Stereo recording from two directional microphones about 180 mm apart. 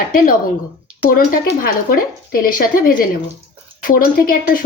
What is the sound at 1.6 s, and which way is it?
A woman's voice, 55° left (ahead or behind).